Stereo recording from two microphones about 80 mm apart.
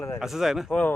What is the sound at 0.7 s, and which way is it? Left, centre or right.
Speech, left.